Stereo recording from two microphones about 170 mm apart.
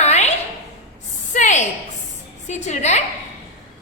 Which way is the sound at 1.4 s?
45° left (ahead or behind).